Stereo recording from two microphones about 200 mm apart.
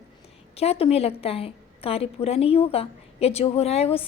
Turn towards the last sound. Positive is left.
turn(degrees=30)  # may be behind; listen again after turning